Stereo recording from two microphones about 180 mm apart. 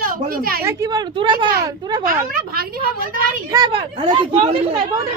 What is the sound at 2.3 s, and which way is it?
Speech, 55° right (ahead or behind).